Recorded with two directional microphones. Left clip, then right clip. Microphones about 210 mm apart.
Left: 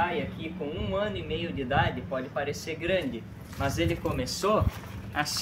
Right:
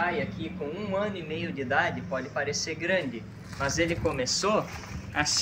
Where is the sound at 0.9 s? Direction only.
10° right (ahead or behind).